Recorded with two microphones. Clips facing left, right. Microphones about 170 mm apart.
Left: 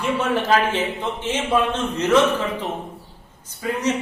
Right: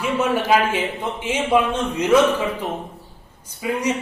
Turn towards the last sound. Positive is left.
turn(degrees=-10)  # may be behind; listen again after turning